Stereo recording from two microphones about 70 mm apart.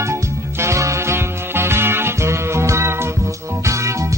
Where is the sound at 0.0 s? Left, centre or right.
Right.